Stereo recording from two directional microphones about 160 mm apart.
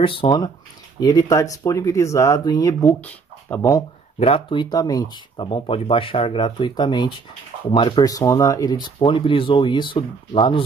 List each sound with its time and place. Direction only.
0.0 s speech: 35° left (ahead or behind); by 3.6 s 15° left (ahead or behind)
4.2 s speech: 35° left (ahead or behind)